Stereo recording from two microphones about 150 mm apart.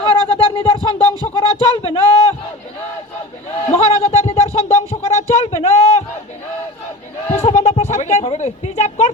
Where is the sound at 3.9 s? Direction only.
40° left (ahead or behind).